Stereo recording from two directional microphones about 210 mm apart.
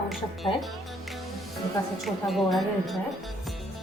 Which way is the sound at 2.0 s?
Centre (ahead or behind).